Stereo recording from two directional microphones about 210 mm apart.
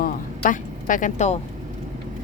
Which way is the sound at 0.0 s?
40° left (ahead or behind).